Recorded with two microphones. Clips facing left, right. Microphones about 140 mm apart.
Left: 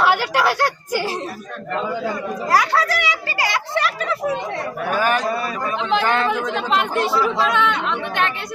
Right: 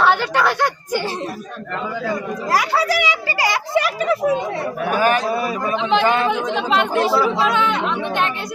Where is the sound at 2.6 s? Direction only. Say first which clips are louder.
Right 1 dB; 10° right (ahead or behind).